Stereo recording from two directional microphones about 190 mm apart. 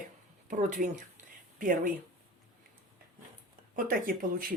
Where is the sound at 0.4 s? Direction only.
45° right (ahead or behind).